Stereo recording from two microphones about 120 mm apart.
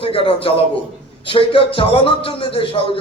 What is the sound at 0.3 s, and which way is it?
A man's voice, 50° left (ahead or behind).